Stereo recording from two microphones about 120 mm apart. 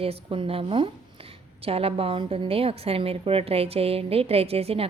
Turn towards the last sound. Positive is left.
turn(degrees=-55)  # may be behind; listen again after turning